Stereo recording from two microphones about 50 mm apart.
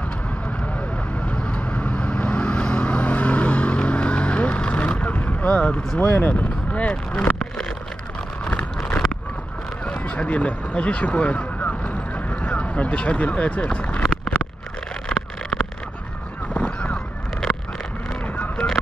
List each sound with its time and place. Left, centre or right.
1.2 s vehicle: centre
5.9 s speech: left
6.7 s speech: left
8.5 s a sound: left
16.5 s a sound: left
18.4 s honk: centre